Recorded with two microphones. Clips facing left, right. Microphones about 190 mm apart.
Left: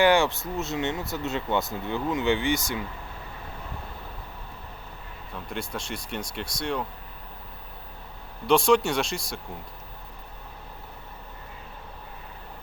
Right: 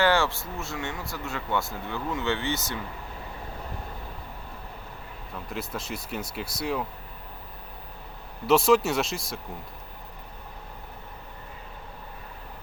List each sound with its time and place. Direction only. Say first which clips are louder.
0.0 s speech: left 3 dB; 15° left (ahead or behind)
5.5 s speech: even; centre (ahead or behind)
8.4 s speech: even; 5° right (ahead or behind)